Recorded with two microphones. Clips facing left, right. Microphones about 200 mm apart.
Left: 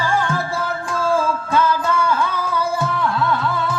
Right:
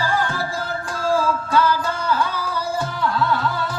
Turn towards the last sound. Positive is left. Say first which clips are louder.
# left 2 dB
turn(degrees=-35)  # may be behind; listen again after turning